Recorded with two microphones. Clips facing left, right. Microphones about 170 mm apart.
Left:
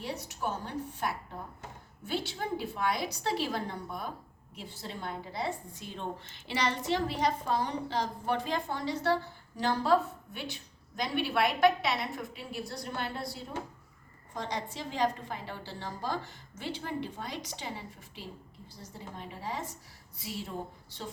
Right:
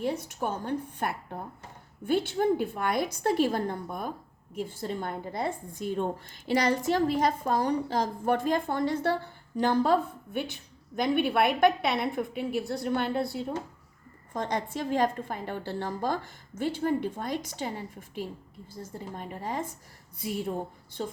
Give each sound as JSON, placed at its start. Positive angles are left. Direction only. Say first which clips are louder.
{"t": 0.0, "sound": "a woman's voice", "louder": "right 6 dB", "side_deg": -50}